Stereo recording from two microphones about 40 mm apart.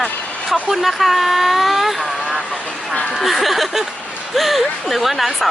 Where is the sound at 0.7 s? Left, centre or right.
Centre.